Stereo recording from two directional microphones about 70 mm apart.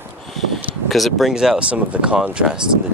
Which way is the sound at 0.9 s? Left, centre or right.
Centre.